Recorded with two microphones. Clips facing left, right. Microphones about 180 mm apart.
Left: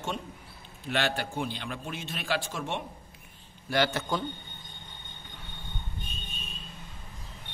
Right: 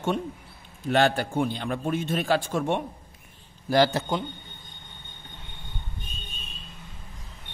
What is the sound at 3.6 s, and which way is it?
Speech, 40° right (ahead or behind).